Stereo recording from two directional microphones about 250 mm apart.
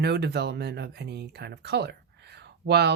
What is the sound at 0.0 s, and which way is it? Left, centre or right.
Speech, right.